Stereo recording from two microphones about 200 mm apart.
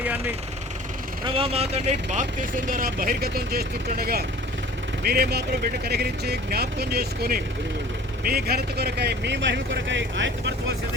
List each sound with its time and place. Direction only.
1.2 s speech: 25° right (ahead or behind); by 10.5 s 65° right (ahead or behind)